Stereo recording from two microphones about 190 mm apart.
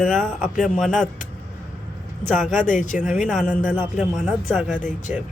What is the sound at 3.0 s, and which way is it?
Speech, 5° right (ahead or behind).